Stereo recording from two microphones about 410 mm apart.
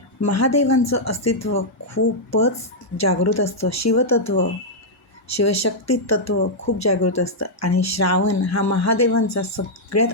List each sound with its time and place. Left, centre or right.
0.3 s speech: left